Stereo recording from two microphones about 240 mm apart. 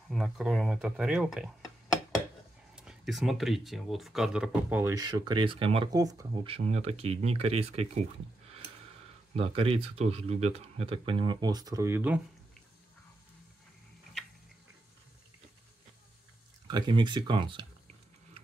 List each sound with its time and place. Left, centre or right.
0.1 s speech: centre
2.7 s speech: centre; by 8.0 s right
9.3 s speech: right
16.6 s a sound: centre